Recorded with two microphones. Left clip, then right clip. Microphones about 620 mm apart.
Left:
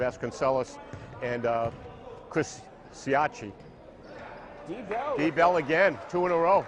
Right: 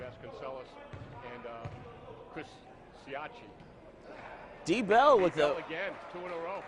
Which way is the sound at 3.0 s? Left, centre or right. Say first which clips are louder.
Left 16 dB; left.